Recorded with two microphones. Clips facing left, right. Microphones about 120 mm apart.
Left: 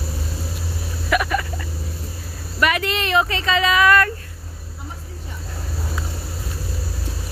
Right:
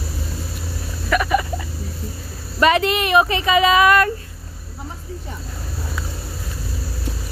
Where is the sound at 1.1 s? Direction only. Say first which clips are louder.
Even; 5° left (ahead or behind).